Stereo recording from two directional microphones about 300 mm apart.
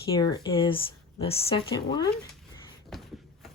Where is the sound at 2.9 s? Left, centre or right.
Centre.